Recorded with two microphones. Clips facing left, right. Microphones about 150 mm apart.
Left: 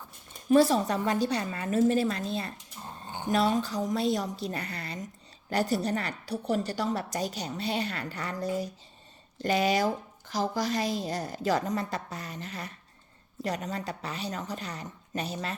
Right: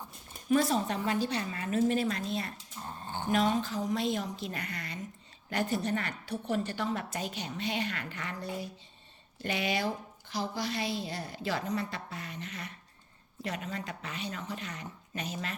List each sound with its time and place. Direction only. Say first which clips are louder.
0.5 s a woman's voice: left 5 dB; 35° left (ahead or behind)